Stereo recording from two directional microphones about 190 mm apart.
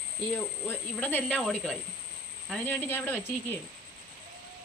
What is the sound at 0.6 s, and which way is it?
Speech, 10° left (ahead or behind).